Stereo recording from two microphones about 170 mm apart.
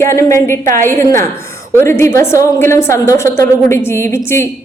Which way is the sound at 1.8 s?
15° left (ahead or behind).